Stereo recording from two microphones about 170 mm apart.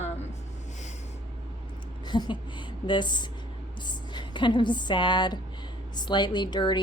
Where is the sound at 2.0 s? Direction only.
25° left (ahead or behind).